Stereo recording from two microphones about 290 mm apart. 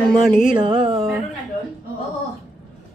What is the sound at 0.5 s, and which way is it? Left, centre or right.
Speech, centre.